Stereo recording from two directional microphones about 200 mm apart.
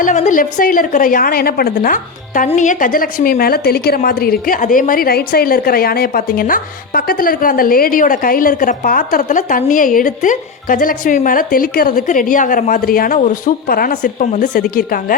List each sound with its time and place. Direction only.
0.0 s a woman's voice: 40° left (ahead or behind)